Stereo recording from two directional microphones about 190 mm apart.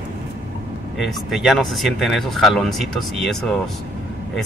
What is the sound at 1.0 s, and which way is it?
Speech, centre (ahead or behind).